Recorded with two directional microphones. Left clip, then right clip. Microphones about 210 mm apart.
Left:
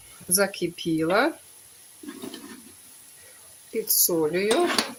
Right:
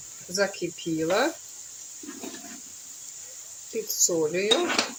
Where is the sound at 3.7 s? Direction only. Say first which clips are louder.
Left 1 dB; 15° left (ahead or behind).